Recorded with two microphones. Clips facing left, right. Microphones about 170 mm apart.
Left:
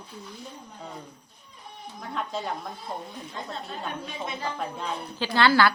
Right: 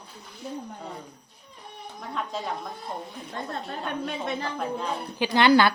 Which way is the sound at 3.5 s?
60° right (ahead or behind).